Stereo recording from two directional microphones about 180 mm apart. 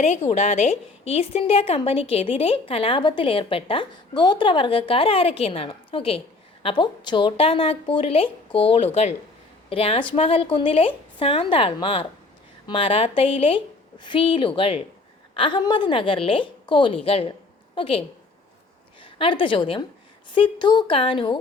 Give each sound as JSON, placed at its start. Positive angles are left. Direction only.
{"t": 0.0, "sound": "a woman's voice", "side_deg": 40}
{"t": 19.0, "sound": "a woman's voice", "side_deg": 30}